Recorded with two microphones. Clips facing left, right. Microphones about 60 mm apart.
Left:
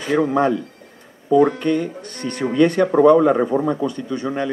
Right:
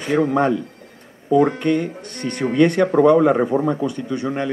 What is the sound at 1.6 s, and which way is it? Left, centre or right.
Speech, right.